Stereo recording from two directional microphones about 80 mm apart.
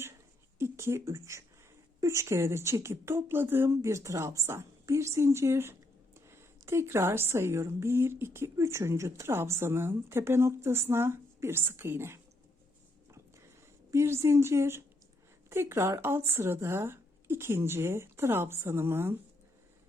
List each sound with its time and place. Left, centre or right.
0.6 s a woman's voice: right
13.1 s a sound: right
13.9 s a woman's voice: right